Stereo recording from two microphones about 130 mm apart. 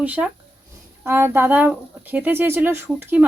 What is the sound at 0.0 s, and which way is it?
Speech, 10° right (ahead or behind).